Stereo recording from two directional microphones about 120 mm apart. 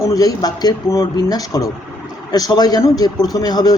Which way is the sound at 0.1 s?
30° left (ahead or behind).